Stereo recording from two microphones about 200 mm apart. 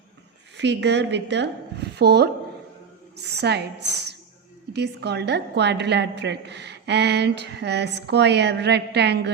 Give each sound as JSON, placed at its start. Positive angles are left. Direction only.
{"t": 0.5, "sound": "a woman's voice", "side_deg": -60}